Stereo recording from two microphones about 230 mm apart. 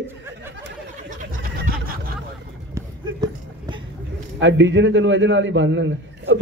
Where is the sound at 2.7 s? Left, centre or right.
Centre.